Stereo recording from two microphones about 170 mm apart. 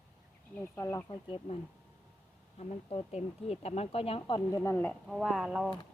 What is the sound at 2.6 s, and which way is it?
Speech, 40° left (ahead or behind).